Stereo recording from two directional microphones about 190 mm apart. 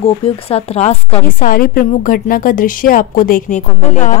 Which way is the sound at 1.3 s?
50° left (ahead or behind).